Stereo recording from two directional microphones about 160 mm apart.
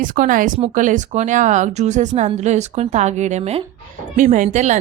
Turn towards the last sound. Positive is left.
turn(degrees=-50)  # may be behind; listen again after turning